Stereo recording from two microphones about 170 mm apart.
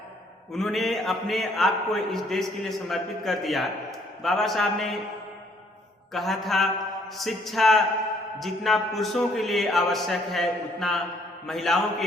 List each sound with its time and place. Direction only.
0.5 s a man's voice: centre (ahead or behind)
6.1 s a man's voice: centre (ahead or behind)